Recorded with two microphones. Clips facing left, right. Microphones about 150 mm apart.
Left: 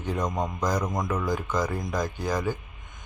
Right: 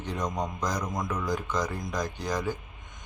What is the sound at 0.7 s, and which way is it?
Speech, 20° left (ahead or behind).